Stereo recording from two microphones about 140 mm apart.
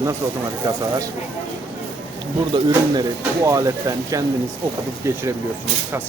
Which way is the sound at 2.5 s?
30° right (ahead or behind).